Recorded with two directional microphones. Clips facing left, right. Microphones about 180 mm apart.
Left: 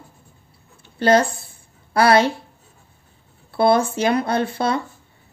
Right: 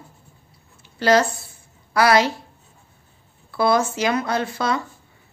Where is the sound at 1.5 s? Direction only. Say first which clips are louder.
Left 1 dB; 30° left (ahead or behind).